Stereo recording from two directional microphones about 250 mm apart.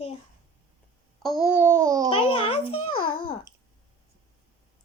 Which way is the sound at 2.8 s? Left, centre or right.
Left.